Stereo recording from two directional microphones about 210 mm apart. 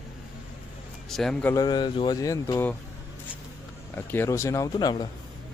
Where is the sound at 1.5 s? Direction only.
20° left (ahead or behind).